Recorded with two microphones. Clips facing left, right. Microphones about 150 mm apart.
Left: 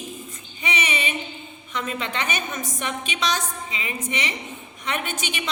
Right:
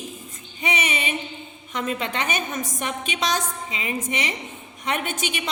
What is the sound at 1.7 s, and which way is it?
A woman's voice, 45° right (ahead or behind).